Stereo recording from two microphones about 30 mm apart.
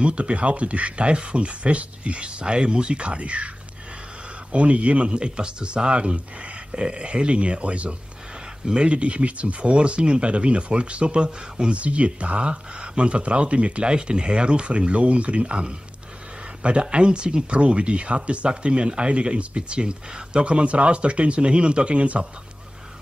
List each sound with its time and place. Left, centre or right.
0.0 s speech: right
11.2 s speech: right
11.7 s speech: right
17.6 s speech: right